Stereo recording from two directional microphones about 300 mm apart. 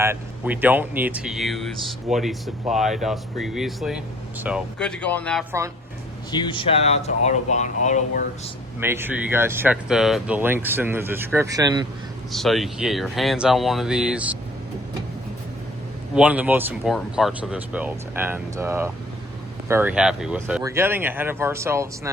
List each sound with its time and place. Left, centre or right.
0.0 s speech: centre
5.5 s speech: centre
6.3 s speech: centre
8.8 s speech: centre
12.3 s speech: centre
16.1 s speech: centre